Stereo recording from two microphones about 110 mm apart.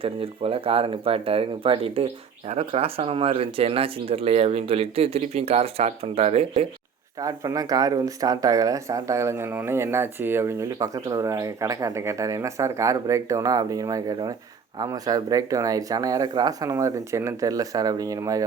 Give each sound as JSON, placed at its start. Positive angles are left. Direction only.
{"t": 0.0, "sound": "speech", "side_deg": -60}
{"t": 7.2, "sound": "speech", "side_deg": -30}